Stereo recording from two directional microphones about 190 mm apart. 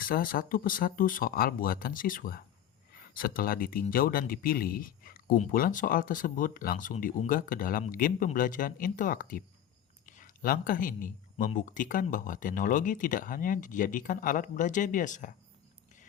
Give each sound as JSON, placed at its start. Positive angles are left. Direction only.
{"t": 0.0, "sound": "speech", "side_deg": 50}